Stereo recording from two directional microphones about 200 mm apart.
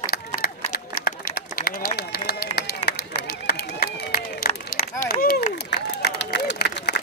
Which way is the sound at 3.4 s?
50° left (ahead or behind).